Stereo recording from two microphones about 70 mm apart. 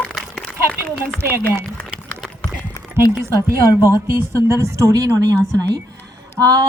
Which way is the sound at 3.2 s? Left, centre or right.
Right.